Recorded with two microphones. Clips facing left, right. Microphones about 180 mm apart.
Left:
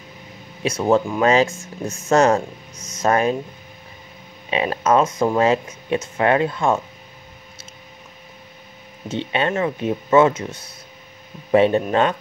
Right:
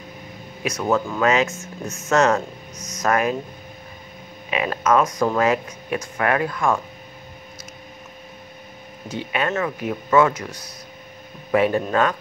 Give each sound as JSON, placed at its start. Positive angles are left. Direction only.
{"t": 0.7, "sound": "speech", "side_deg": 30}
{"t": 4.5, "sound": "speech", "side_deg": 30}
{"t": 9.1, "sound": "speech", "side_deg": 25}